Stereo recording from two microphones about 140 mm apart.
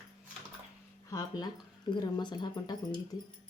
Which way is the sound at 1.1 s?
25° left (ahead or behind).